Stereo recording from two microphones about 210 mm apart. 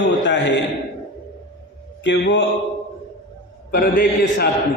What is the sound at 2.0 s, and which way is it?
Mantra, 60° left (ahead or behind).